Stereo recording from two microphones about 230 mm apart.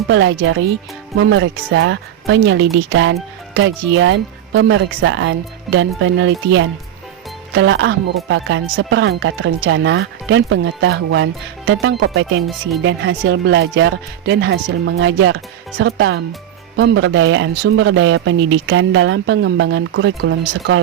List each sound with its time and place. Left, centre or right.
0.1 s speech: right
7.5 s speech: right